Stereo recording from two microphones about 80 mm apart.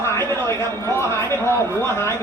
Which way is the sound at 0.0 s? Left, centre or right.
Left.